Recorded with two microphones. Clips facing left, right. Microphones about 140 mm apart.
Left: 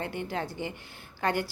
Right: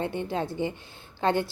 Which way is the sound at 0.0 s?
20° right (ahead or behind).